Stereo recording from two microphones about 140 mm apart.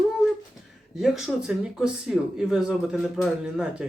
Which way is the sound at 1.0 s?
Centre (ahead or behind).